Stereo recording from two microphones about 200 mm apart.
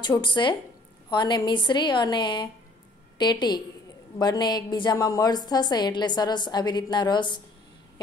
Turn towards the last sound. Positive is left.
turn(degrees=20)  # may be behind; listen again after turning